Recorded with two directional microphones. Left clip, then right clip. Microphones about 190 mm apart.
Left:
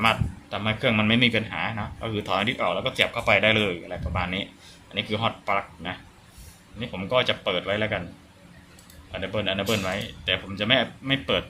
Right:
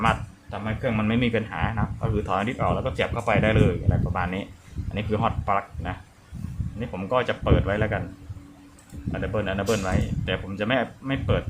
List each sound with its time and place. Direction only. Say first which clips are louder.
0.0 s a sound: left 1 dB; centre (ahead or behind)
0.6 s a man's voice: left 4 dB; 15° left (ahead or behind)
1.1 s speech: left 3 dB; centre (ahead or behind)
9.1 s speech: even; centre (ahead or behind)